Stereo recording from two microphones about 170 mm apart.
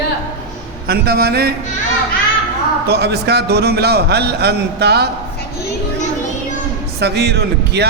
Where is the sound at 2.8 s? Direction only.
70° right (ahead or behind).